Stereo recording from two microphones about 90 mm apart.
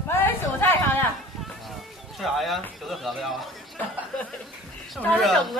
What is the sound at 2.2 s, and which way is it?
A man's voice, centre (ahead or behind).